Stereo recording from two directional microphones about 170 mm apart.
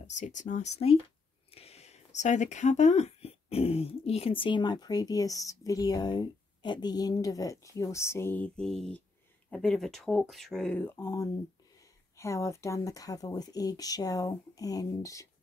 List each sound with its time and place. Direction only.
0.0 s speech: 45° left (ahead or behind); by 15.2 s 20° left (ahead or behind)